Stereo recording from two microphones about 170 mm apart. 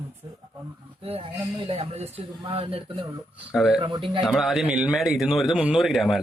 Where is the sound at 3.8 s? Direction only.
30° right (ahead or behind).